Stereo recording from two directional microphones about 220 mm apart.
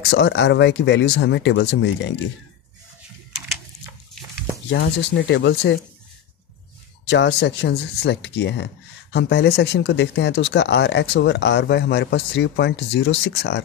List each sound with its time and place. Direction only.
0.1 s speech: 50° left (ahead or behind)
4.6 s speech: 55° left (ahead or behind)
7.1 s speech: 50° left (ahead or behind)